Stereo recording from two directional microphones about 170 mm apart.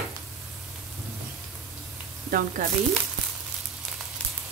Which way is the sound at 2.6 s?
50° right (ahead or behind).